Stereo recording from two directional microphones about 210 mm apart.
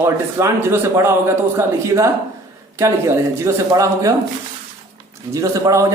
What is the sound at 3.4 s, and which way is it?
Speech, 15° right (ahead or behind).